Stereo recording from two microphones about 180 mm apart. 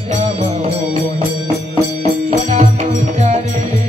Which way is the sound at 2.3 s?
40° right (ahead or behind).